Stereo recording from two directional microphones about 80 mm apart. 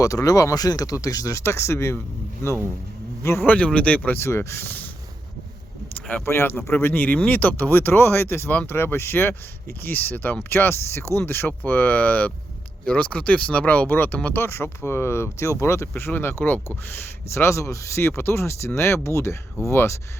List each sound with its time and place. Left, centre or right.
0.0 s speech: left
3.2 s speech: left
3.5 s speech: centre
4.2 s speech: left
6.2 s speech: left